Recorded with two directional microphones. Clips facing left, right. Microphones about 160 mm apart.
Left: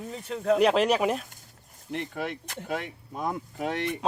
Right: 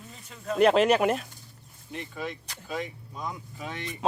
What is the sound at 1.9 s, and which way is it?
Speech, 65° left (ahead or behind).